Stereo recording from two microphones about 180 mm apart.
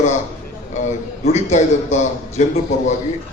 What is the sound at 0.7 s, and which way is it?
A man's voice, 40° left (ahead or behind).